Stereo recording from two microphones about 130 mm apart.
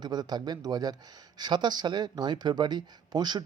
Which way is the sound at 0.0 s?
30° right (ahead or behind).